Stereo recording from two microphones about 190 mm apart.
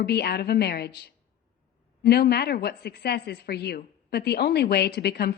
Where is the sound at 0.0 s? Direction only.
60° left (ahead or behind).